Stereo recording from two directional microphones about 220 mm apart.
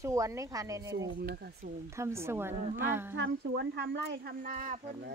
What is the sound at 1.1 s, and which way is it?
Speech, 45° right (ahead or behind).